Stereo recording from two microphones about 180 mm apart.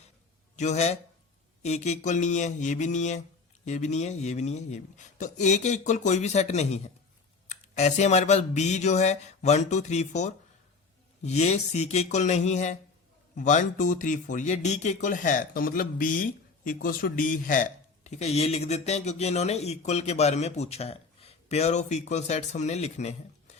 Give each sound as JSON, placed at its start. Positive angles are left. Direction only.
{"t": 0.5, "sound": "a man's voice", "side_deg": 40}